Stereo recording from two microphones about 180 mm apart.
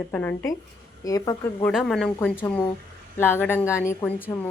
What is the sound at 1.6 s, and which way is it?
Speech, centre (ahead or behind).